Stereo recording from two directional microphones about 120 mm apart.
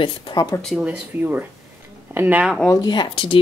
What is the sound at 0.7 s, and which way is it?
Speech, 5° right (ahead or behind).